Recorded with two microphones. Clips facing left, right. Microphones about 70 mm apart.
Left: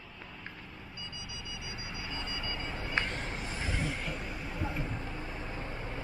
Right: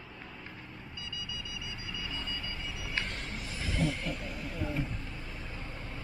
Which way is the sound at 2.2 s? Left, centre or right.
Left.